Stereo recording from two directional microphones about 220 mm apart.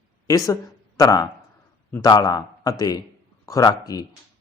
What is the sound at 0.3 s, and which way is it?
A man's voice, 15° left (ahead or behind).